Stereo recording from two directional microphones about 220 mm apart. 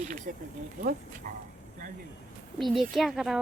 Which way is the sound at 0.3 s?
40° right (ahead or behind).